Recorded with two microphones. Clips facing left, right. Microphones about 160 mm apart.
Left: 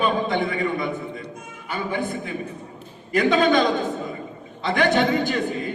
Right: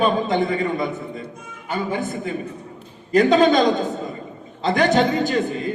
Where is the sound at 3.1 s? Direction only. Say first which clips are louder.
Right 3 dB; 40° right (ahead or behind).